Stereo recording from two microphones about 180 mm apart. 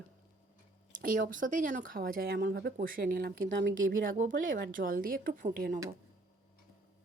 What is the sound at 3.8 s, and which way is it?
Speech, 50° right (ahead or behind).